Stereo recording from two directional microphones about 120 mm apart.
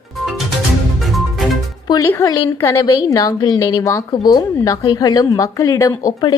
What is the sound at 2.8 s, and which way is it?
A woman's voice, 30° left (ahead or behind).